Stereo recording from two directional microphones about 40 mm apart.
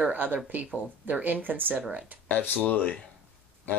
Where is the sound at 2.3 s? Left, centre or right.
Left.